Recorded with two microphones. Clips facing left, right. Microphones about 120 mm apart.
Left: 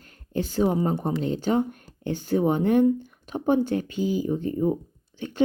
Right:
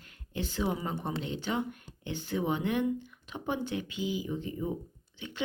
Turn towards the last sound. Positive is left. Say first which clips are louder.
# left 13 dB
turn(degrees=45)  # may be behind; listen again after turning